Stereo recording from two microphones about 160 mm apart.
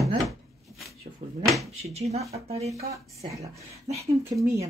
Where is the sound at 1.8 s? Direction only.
40° right (ahead or behind).